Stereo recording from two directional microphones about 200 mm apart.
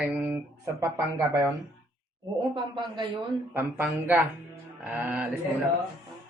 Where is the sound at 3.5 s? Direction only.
10° right (ahead or behind).